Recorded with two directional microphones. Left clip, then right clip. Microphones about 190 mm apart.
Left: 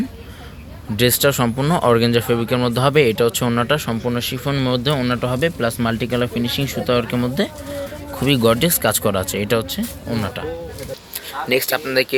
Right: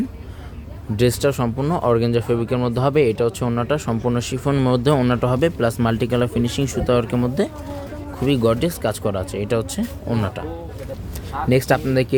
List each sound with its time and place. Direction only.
0.9 s speech: 10° right (ahead or behind)
8.2 s speech: centre (ahead or behind)
9.6 s speech: 15° right (ahead or behind)
11.4 s speech: centre (ahead or behind)